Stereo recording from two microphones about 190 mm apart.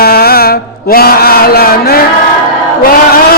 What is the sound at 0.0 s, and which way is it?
Chant, 55° left (ahead or behind).